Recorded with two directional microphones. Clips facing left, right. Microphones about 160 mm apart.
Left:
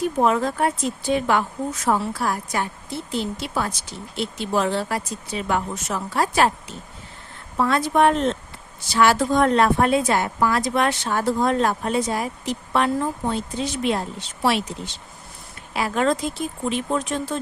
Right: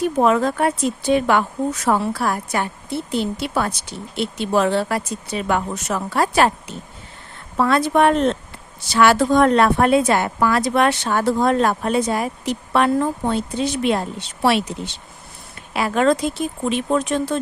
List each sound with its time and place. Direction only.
0.2 s a woman's voice: 90° right; by 14.7 s 65° right (ahead or behind)
15.7 s a woman's voice: 70° right (ahead or behind)